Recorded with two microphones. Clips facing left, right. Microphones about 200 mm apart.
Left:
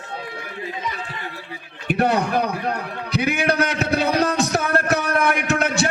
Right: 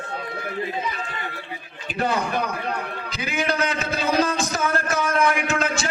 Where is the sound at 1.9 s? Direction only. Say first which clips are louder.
Left 5 dB; 65° left (ahead or behind).